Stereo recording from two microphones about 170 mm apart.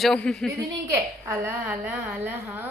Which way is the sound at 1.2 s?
15° right (ahead or behind).